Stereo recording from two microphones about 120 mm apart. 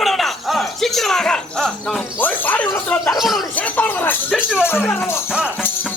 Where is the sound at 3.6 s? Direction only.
15° left (ahead or behind).